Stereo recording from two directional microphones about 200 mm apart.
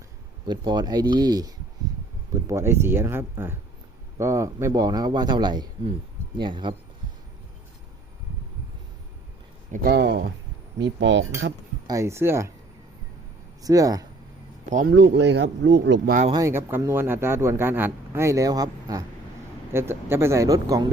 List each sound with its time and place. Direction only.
0.4 s a man's voice: 20° right (ahead or behind)
9.7 s speech: 50° right (ahead or behind)
11.9 s speech: 15° right (ahead or behind)
13.6 s speech: 15° right (ahead or behind)
14.8 s speech: 55° right (ahead or behind)
16.3 s speech: 15° right (ahead or behind)